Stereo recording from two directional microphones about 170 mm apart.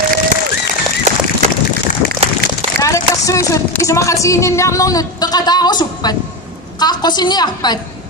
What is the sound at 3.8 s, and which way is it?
A woman's voice, 20° left (ahead or behind).